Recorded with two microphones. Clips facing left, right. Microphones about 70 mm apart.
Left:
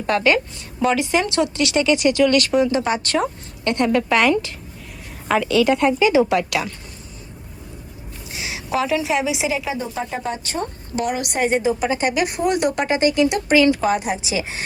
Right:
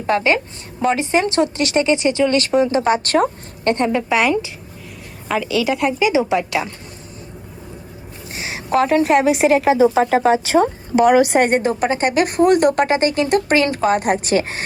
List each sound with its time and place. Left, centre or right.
0.1 s a woman's voice: right
3.8 s a woman's voice: centre
5.3 s speech: centre
6.1 s a woman's voice: centre
8.3 s a woman's voice: right
10.9 s a woman's voice: right
11.3 s a woman's voice: right